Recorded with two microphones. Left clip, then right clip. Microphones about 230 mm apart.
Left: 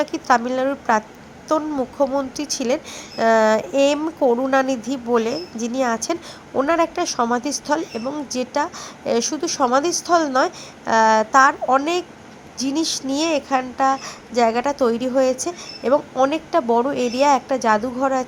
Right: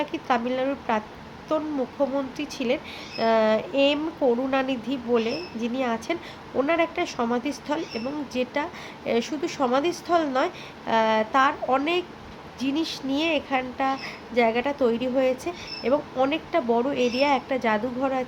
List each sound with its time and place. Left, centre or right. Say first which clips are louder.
0.0 s speech: left 7 dB; left